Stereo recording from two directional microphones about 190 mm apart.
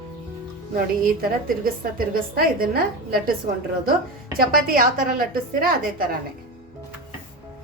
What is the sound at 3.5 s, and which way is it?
A woman's voice, 45° right (ahead or behind).